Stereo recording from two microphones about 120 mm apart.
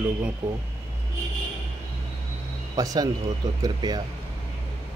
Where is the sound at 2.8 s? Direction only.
30° right (ahead or behind).